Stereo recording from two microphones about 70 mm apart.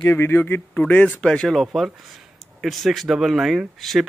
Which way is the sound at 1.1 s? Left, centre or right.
Centre.